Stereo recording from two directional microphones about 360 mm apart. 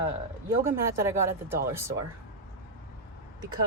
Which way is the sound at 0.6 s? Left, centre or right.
Centre.